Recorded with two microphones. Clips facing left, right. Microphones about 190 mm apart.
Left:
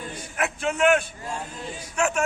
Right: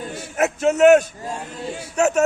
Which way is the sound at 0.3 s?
40° right (ahead or behind).